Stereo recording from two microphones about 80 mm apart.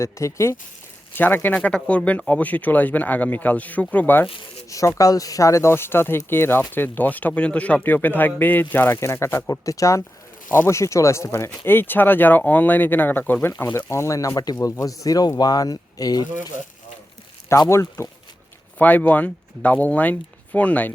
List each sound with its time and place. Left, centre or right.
0.0 s speech: left
1.1 s speech: left
4.7 s speech: left
10.5 s speech: left
13.9 s speech: left
17.7 s speech: left
18.8 s speech: left